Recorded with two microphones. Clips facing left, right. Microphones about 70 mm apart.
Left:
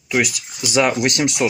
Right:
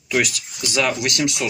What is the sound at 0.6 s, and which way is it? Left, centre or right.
Speech, left.